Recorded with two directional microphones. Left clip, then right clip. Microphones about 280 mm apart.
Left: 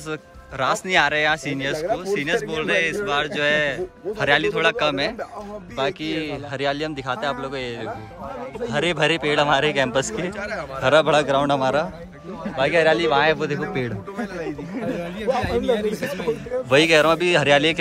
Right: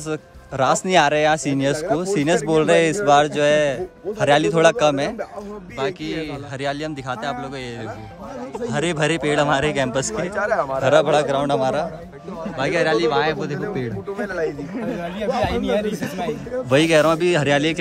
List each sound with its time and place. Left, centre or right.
0.1 s speech: centre
8.6 s speech: centre
10.3 s speech: right
10.8 s speech: centre
14.2 s speech: centre
15.9 s speech: centre